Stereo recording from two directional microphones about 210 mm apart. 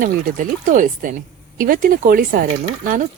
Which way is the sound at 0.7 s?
40° right (ahead or behind).